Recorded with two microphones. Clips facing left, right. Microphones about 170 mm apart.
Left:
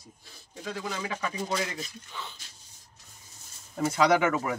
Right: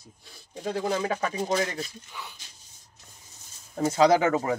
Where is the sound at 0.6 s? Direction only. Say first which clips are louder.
Right 7 dB; 40° right (ahead or behind).